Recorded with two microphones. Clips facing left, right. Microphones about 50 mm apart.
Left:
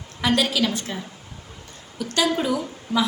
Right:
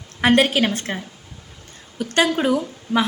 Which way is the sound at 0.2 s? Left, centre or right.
Right.